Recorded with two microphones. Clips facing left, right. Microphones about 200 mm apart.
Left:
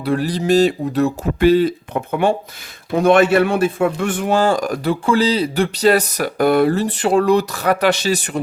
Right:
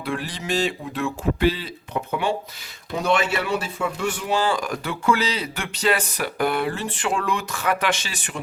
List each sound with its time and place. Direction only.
0.0 s speech: 40° left (ahead or behind)